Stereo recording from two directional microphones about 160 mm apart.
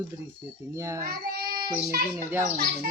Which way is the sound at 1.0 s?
70° right (ahead or behind).